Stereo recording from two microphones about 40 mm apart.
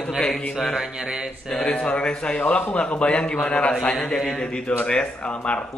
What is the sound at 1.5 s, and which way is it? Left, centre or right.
Speech, left.